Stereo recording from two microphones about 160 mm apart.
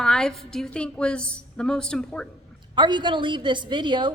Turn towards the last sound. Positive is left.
turn(degrees=-30)  # may be behind; listen again after turning